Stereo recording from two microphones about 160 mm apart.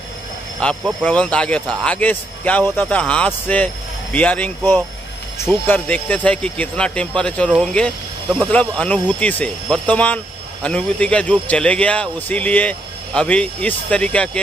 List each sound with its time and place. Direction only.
0.6 s speech: 5° left (ahead or behind)